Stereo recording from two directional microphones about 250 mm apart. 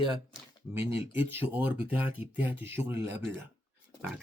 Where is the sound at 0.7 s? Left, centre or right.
Centre.